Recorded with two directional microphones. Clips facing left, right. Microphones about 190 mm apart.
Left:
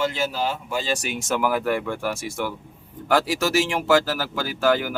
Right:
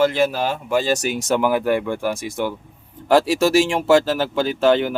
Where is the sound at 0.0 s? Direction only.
60° right (ahead or behind); by 1.4 s 40° right (ahead or behind).